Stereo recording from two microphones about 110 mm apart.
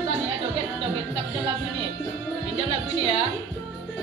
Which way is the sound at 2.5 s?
60° right (ahead or behind).